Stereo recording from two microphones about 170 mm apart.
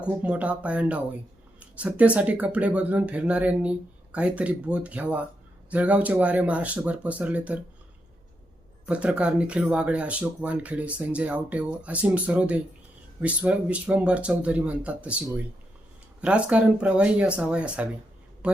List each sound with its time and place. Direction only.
0.0 s speech: 10° right (ahead or behind)
8.9 s speech: 5° right (ahead or behind)
16.2 s speech: 5° right (ahead or behind)